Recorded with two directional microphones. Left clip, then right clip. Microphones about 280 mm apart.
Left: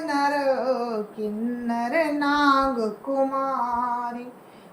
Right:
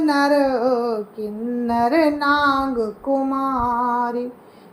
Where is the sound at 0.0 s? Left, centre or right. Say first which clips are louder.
Right 6 dB; right.